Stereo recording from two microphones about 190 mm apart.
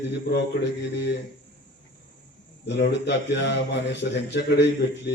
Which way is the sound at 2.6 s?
65° left (ahead or behind).